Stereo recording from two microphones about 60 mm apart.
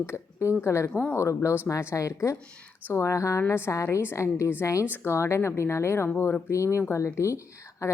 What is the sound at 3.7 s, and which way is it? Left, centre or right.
A woman's voice, left.